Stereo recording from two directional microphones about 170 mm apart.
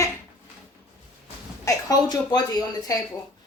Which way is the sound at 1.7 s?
20° left (ahead or behind).